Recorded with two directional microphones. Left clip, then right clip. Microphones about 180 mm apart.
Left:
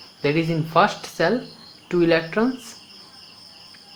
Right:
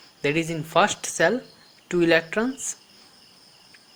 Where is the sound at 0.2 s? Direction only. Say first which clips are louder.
Left 3 dB; 25° right (ahead or behind).